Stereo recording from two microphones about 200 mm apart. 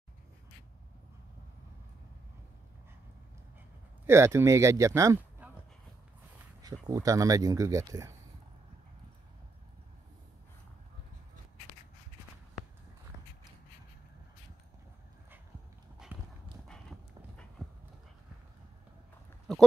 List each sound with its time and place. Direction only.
4.0 s speech: 15° right (ahead or behind)
6.6 s speech: 20° right (ahead or behind)
16.1 s dog: 10° right (ahead or behind)